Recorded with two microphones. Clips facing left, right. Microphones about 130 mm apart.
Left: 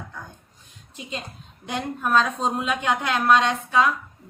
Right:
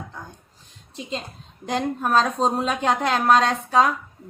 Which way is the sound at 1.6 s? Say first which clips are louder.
Right 3 dB; 40° right (ahead or behind).